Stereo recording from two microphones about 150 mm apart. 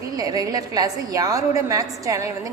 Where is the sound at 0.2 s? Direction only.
25° right (ahead or behind).